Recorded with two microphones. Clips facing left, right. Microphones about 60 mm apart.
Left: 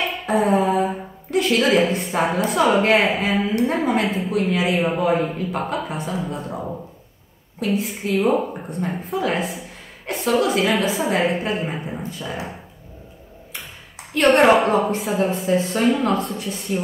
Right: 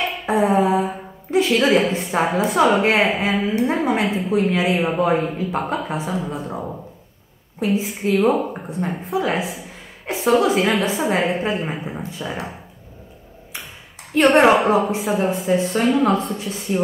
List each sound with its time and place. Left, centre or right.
0.0 s speech: centre
7.6 s speech: centre
14.2 s speech: centre